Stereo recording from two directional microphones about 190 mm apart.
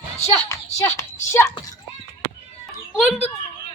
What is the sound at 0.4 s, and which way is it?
Speech, 15° left (ahead or behind).